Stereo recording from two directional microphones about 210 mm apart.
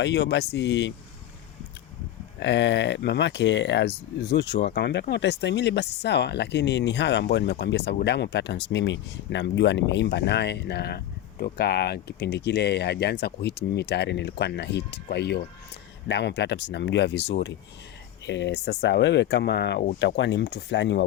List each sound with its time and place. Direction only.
0.0 s speech: 55° left (ahead or behind)
2.4 s speech: 55° left (ahead or behind)